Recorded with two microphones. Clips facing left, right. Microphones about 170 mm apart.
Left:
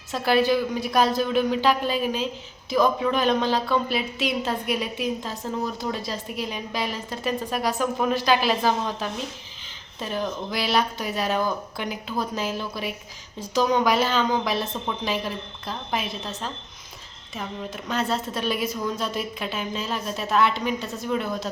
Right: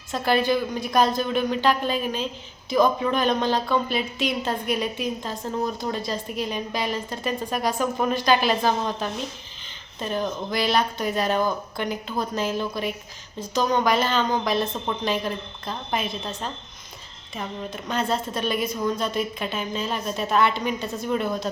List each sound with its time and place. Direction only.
0.1 s a woman's voice: 5° left (ahead or behind)